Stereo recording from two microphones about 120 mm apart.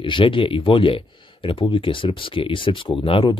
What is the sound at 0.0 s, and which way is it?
Speech, 45° left (ahead or behind).